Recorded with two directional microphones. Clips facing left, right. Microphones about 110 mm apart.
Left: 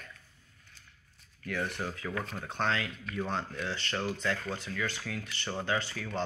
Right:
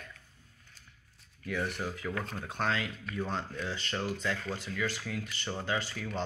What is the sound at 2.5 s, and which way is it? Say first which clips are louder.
Speech: left 1 dB; 10° right (ahead or behind).